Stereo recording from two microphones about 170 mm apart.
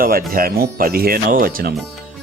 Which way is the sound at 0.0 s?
55° right (ahead or behind).